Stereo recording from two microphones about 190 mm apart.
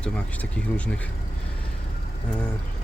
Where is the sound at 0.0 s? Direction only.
5° left (ahead or behind).